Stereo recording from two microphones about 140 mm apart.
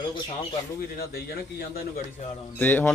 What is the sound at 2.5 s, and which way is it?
Speech, 15° left (ahead or behind).